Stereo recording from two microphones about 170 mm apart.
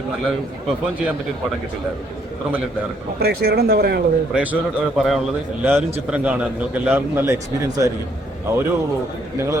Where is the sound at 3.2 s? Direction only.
70° right (ahead or behind).